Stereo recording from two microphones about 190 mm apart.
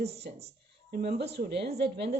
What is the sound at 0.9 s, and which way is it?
Speech, 55° right (ahead or behind).